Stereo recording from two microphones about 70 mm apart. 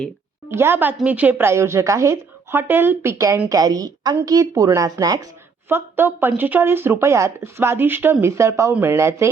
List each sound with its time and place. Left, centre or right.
0.5 s a woman's voice: right
1.4 s speech: right
2.5 s speech: right
3.5 s speech: right
5.6 s speech: right
7.0 s speech: right
8.2 s speech: right
8.8 s speech: right